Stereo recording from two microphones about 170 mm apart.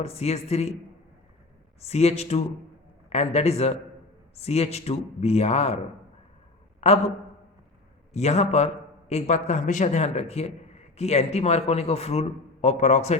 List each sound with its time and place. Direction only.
0.0 s a man's voice: 35° left (ahead or behind)
1.8 s a man's voice: 40° left (ahead or behind)
6.7 s a sound: 40° left (ahead or behind)
8.1 s a man's voice: 40° left (ahead or behind)